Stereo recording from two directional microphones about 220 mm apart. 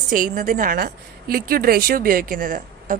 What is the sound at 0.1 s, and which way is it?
A woman's voice, 35° right (ahead or behind).